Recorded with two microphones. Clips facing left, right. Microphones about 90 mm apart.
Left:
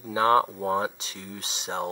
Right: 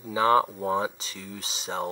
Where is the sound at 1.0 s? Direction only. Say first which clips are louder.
Even; 40° left (ahead or behind).